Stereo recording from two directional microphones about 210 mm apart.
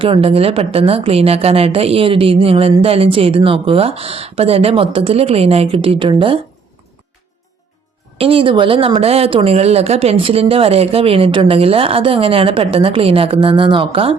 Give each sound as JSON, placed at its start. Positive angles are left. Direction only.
{"t": 0.0, "sound": "speech", "side_deg": -25}
{"t": 8.2, "sound": "speech", "side_deg": -25}